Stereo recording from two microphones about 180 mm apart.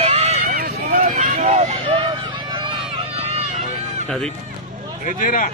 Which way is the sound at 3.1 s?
35° right (ahead or behind).